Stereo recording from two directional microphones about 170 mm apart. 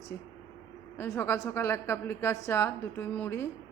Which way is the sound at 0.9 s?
15° left (ahead or behind).